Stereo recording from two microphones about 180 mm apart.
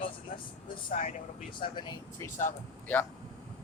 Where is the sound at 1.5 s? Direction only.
25° left (ahead or behind).